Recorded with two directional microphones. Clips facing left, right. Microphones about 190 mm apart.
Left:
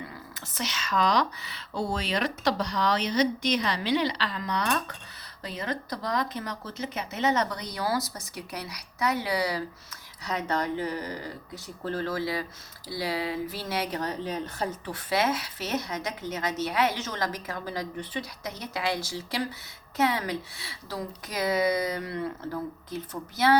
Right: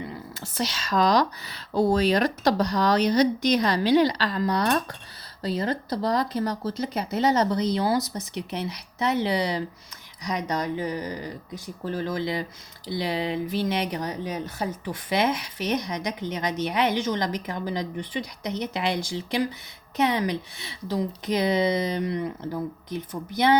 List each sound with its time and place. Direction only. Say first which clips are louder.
0.0 s a woman's voice: right 6 dB; 30° right (ahead or behind)